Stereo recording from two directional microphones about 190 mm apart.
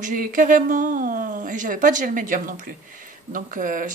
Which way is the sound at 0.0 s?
45° right (ahead or behind).